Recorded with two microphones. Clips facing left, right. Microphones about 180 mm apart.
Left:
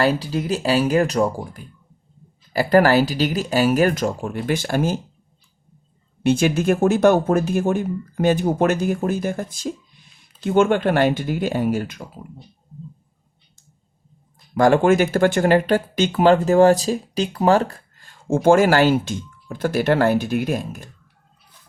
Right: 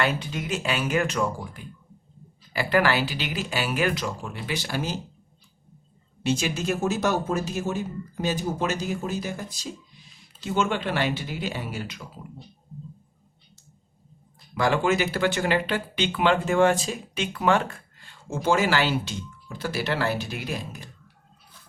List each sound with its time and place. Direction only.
0.0 s speech: 35° left (ahead or behind); by 4.9 s 50° left (ahead or behind)
6.2 s speech: 55° left (ahead or behind)
14.5 s speech: 45° left (ahead or behind)